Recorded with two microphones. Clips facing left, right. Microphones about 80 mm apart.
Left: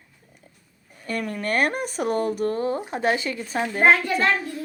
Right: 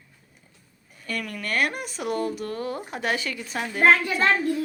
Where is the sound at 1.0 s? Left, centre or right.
Left.